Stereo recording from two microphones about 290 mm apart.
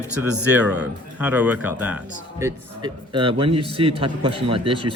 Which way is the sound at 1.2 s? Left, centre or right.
Centre.